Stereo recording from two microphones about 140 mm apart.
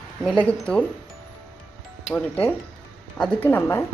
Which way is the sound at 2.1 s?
10° left (ahead or behind).